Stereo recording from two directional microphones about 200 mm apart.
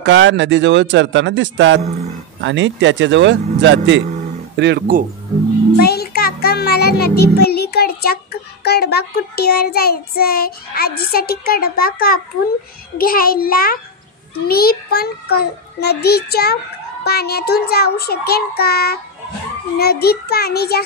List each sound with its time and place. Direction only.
0.0 s speech: 65° right (ahead or behind); by 5.0 s 50° right (ahead or behind)
5.8 s a child's voice: 50° left (ahead or behind)
12.9 s child singing: 45° left (ahead or behind)